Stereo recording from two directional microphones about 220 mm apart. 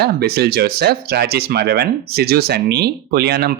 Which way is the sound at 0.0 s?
45° right (ahead or behind).